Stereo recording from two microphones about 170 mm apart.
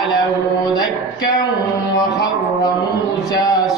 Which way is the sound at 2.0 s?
25° left (ahead or behind).